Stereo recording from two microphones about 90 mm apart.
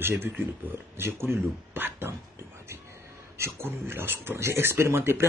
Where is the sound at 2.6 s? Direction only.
30° right (ahead or behind).